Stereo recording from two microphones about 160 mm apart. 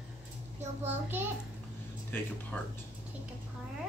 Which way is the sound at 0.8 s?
15° right (ahead or behind).